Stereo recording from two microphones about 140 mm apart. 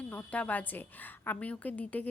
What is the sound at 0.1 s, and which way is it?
A woman's voice, 10° left (ahead or behind).